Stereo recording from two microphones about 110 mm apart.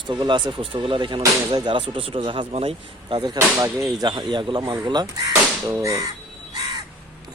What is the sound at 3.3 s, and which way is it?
Speech, 30° right (ahead or behind).